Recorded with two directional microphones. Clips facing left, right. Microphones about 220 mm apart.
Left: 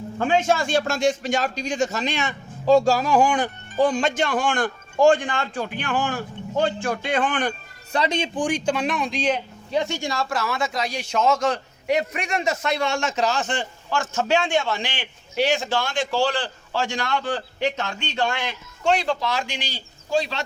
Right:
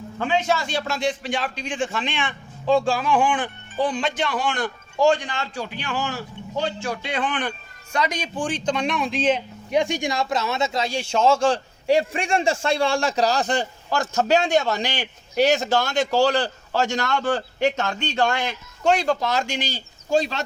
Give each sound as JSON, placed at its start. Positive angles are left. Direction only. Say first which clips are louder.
{"t": 0.2, "sound": "a man's voice", "louder": "left 2 dB", "side_deg": 50}
{"t": 7.9, "sound": "speech", "louder": "left 2 dB", "side_deg": 30}
{"t": 8.4, "sound": "a man's voice", "louder": "even", "side_deg": 10}
{"t": 9.6, "sound": "a man's voice", "louder": "right 3 dB", "side_deg": -15}